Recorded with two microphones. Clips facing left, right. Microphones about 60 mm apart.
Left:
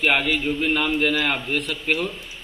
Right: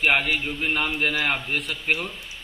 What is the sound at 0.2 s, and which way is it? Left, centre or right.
A man's voice, centre.